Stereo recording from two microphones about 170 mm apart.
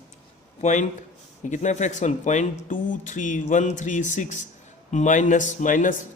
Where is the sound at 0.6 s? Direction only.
45° left (ahead or behind).